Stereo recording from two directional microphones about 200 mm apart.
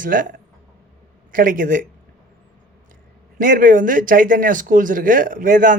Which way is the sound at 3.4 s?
45° right (ahead or behind).